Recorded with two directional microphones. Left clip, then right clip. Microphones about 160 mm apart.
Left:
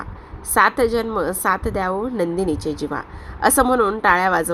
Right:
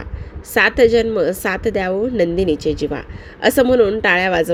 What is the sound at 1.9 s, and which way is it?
Speech, 20° right (ahead or behind).